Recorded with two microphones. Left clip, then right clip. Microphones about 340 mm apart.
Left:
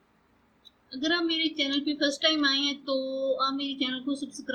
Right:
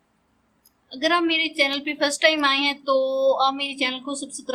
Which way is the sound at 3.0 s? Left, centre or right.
Right.